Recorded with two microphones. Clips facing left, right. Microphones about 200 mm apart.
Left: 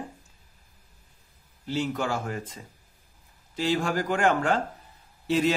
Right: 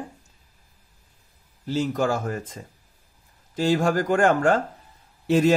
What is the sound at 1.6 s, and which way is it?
Speech, 40° right (ahead or behind).